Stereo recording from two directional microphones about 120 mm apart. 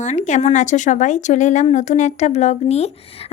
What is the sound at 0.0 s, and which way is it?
A woman's voice, 85° left.